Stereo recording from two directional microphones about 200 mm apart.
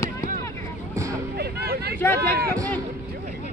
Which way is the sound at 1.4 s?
50° right (ahead or behind).